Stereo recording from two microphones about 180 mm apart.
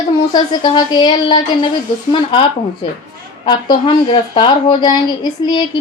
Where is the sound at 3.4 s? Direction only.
30° left (ahead or behind).